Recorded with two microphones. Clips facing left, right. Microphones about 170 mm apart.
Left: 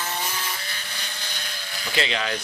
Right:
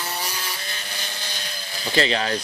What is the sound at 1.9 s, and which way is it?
Speech, 35° right (ahead or behind).